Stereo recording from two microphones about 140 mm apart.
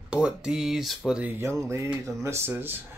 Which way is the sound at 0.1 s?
5° right (ahead or behind).